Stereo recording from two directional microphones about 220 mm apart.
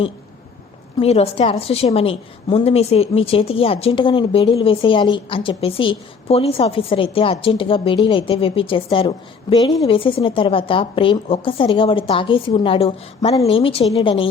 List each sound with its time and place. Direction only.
0.9 s a woman's voice: 25° left (ahead or behind)